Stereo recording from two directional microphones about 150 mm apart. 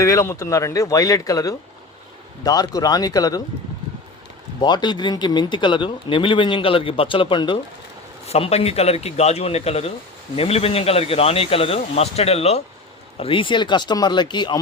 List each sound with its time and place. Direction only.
0.0 s speech: 20° left (ahead or behind)
4.6 s speech: 30° left (ahead or behind)
8.3 s speech: 45° left (ahead or behind)